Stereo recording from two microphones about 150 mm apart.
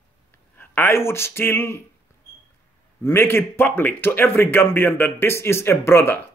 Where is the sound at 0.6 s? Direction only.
15° left (ahead or behind).